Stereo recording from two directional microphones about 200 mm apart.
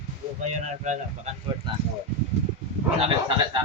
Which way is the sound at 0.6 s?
35° right (ahead or behind).